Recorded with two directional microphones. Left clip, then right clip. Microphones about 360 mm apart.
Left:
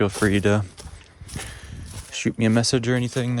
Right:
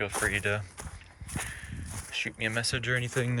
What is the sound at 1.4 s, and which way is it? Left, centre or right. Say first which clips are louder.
Walk: even; centre.